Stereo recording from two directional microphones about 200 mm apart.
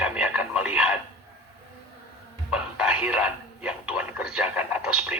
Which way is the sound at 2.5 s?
5° right (ahead or behind).